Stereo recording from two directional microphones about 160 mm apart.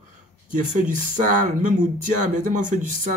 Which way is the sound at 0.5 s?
50° right (ahead or behind).